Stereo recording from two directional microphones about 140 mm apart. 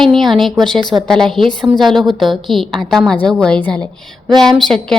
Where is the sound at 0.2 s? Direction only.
Centre (ahead or behind).